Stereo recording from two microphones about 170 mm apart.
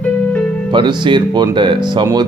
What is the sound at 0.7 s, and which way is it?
Speech, 30° right (ahead or behind).